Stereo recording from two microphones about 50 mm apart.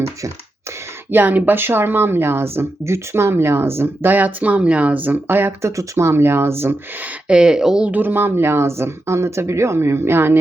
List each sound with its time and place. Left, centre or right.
1.1 s speech: right
5.6 s speech: right
6.1 s speech: right
7.3 s speech: centre
7.9 s speech: right